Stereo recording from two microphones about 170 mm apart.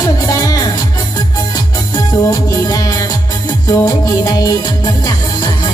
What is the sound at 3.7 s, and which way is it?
Speech, 20° left (ahead or behind).